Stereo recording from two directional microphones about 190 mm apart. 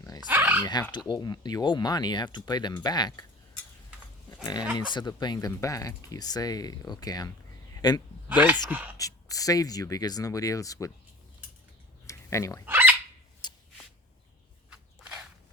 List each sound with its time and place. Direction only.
0.0 s dog: 20° left (ahead or behind)
0.3 s dog: 10° right (ahead or behind)
0.6 s speech: 20° left (ahead or behind)
4.8 s speech: 25° left (ahead or behind)
8.3 s speech: 10° right (ahead or behind)
9.0 s speech: 20° left (ahead or behind)
12.0 s a sound: 15° left (ahead or behind)
12.6 s fowl: 10° right (ahead or behind)
13.4 s shuffle: 20° left (ahead or behind)
14.7 s walk: 5° right (ahead or behind)